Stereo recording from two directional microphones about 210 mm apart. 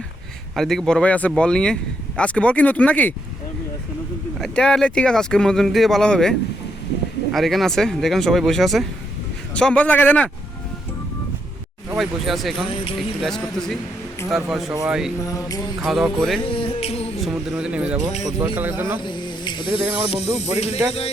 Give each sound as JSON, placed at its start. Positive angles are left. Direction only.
{"t": 0.5, "sound": "speech", "side_deg": 0}
{"t": 4.4, "sound": "a man's voice", "side_deg": 5}
{"t": 11.9, "sound": "speech", "side_deg": 0}
{"t": 15.3, "sound": "a man's voice", "side_deg": 15}
{"t": 15.8, "sound": "speech", "side_deg": 0}
{"t": 16.4, "sound": "music", "side_deg": 25}
{"t": 17.2, "sound": "a man's voice", "side_deg": 0}
{"t": 19.0, "sound": "speech", "side_deg": 20}